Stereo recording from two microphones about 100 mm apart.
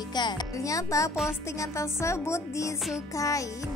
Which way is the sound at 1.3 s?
30° left (ahead or behind).